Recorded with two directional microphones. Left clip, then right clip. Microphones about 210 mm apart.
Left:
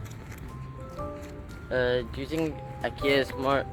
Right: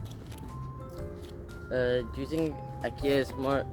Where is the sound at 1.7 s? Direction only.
10° right (ahead or behind).